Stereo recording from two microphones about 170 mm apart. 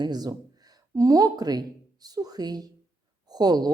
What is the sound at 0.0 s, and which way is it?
Speech, 25° right (ahead or behind).